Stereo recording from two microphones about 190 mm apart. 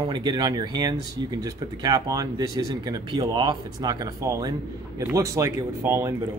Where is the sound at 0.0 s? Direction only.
25° right (ahead or behind).